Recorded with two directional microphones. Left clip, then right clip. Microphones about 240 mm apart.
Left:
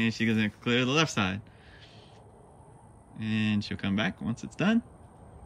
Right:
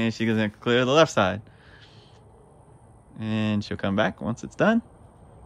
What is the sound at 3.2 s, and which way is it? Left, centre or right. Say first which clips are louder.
Speech: right 3 dB; centre.